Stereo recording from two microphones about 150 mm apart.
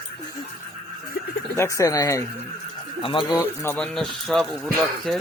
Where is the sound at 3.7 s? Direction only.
5° left (ahead or behind).